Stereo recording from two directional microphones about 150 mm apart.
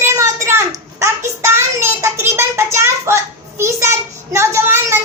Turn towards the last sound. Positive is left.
turn(degrees=-15)  # may be behind; listen again after turning